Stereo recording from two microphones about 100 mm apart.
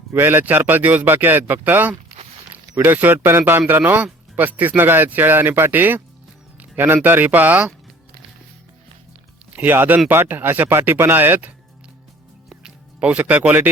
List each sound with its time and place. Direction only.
0.1 s speech: 20° right (ahead or behind)
9.5 s speech: 15° right (ahead or behind)
12.5 s music: 10° right (ahead or behind)